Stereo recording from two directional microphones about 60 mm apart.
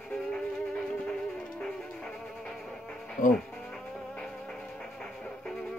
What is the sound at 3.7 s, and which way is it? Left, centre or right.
Music, centre.